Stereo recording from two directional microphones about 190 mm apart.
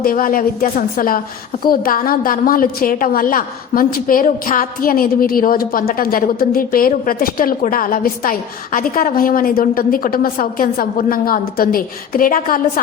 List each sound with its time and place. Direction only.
0.0 s a woman's voice: 50° left (ahead or behind)